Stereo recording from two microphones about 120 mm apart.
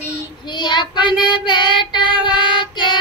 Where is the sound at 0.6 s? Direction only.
40° left (ahead or behind).